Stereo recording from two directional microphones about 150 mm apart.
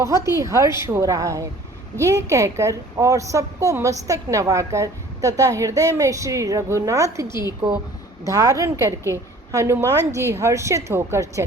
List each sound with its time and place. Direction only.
0.0 s a woman's voice: 20° right (ahead or behind)
7.3 s a woman's voice: 30° left (ahead or behind)
8.3 s a woman's voice: 25° right (ahead or behind)